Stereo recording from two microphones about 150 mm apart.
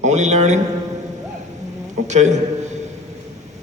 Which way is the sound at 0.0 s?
50° right (ahead or behind).